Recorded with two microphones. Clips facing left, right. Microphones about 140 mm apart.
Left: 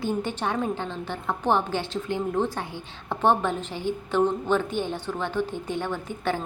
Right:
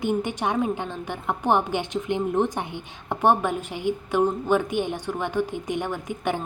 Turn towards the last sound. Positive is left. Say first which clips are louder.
# right 1 dB
turn(degrees=-15)  # may be behind; listen again after turning